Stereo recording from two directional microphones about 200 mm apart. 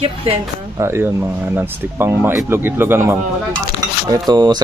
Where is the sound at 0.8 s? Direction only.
10° right (ahead or behind).